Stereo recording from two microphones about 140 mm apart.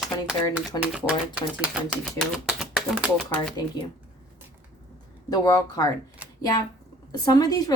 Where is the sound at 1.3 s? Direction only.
10° right (ahead or behind).